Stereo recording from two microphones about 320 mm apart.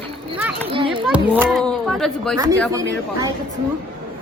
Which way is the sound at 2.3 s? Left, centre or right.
Centre.